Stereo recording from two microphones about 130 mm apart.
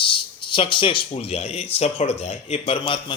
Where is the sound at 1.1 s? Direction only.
55° left (ahead or behind).